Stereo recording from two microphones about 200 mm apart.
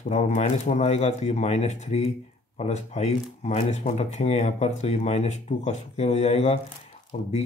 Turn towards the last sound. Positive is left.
turn(degrees=40)  # may be behind; listen again after turning